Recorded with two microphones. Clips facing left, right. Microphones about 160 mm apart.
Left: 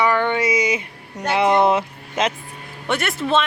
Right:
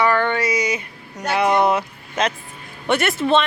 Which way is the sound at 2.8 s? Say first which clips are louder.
Right 3 dB; centre (ahead or behind).